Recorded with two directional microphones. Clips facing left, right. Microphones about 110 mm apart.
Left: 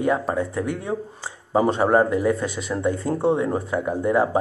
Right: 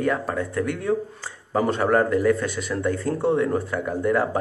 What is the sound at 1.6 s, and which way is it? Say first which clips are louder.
Speech: left 1 dB; 30° left (ahead or behind).